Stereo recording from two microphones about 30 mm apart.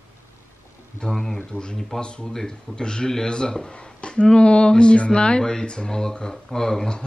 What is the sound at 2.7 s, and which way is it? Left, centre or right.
Speech, left.